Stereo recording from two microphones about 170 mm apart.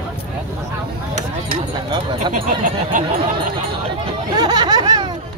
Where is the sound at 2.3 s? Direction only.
50° right (ahead or behind).